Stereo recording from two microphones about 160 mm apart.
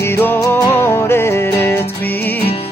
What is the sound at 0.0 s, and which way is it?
Music, 15° left (ahead or behind).